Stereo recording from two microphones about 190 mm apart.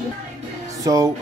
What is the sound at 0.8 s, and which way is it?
Speech, 20° right (ahead or behind).